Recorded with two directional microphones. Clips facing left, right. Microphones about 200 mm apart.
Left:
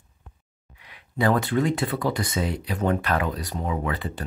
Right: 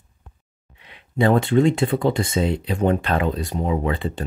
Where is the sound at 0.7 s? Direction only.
25° right (ahead or behind).